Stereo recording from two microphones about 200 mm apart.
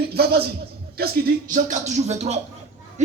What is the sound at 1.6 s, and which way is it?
Speech, 40° right (ahead or behind).